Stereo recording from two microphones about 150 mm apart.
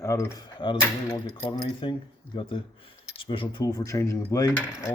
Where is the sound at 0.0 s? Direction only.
20° left (ahead or behind).